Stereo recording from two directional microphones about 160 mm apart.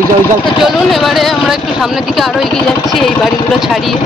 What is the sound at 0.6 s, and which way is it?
Speech, centre (ahead or behind).